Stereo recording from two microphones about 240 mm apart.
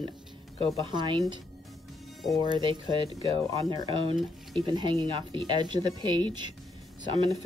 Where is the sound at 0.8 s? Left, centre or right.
Centre.